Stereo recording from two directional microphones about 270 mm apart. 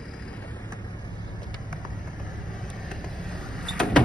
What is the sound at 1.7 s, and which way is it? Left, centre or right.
Vehicle, left.